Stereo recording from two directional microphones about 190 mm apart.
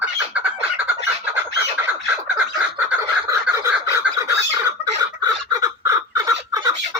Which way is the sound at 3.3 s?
15° right (ahead or behind).